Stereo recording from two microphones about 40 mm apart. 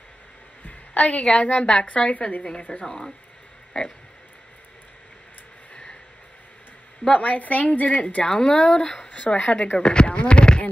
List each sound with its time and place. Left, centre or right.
0.7 s a sound: left
1.4 s speech: left
2.8 s speech: centre
7.1 s a woman's voice: left
8.3 s speech: centre; by 9.8 s left
9.8 s speech: left